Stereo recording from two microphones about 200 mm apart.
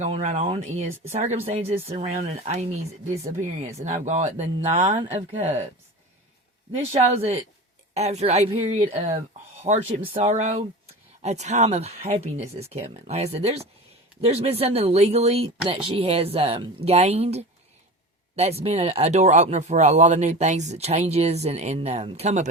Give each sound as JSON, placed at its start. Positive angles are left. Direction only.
{"t": 0.0, "sound": "speech", "side_deg": -35}
{"t": 6.9, "sound": "speech", "side_deg": -30}